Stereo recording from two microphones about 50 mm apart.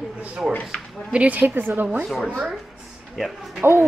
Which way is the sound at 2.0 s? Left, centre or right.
Centre.